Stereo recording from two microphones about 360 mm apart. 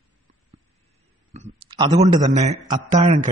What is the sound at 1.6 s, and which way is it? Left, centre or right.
A man's voice, centre.